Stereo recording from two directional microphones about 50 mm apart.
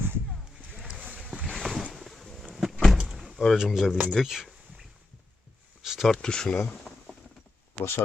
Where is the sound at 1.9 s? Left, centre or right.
Centre.